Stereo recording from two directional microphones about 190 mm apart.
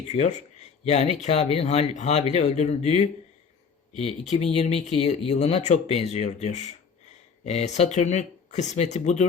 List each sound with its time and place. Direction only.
0.1 s speech: 35° left (ahead or behind)
4.5 s speech: 35° left (ahead or behind)